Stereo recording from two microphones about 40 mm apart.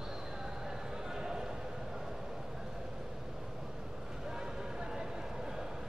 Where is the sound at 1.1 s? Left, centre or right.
Centre.